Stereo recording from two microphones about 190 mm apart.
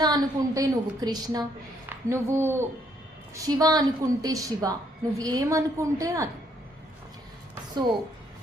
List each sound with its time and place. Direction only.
0.0 s a woman's voice: 20° right (ahead or behind)